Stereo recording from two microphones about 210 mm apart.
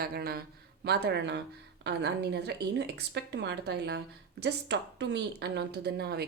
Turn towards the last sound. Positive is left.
turn(degrees=-50)  # may be behind; listen again after turning